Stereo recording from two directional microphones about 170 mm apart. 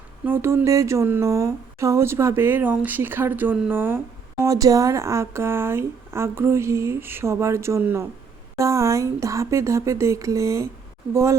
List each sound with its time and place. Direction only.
0.3 s a woman's voice: 15° right (ahead or behind)